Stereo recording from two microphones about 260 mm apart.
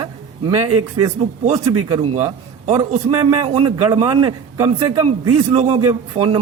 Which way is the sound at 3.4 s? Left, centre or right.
Right.